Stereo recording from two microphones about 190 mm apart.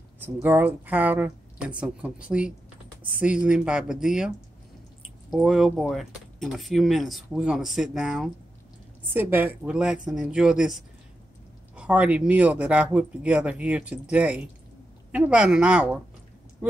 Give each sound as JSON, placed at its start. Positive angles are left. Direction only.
{"t": 0.2, "sound": "a man's voice", "side_deg": -10}